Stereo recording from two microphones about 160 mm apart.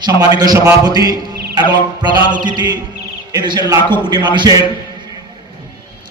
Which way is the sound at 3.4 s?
25° right (ahead or behind).